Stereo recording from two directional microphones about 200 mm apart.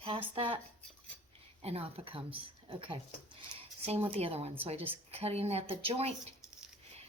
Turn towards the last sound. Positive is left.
turn(degrees=-30)  # may be behind; listen again after turning